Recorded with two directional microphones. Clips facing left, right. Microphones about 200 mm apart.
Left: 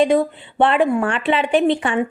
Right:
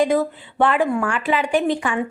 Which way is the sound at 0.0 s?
25° left (ahead or behind).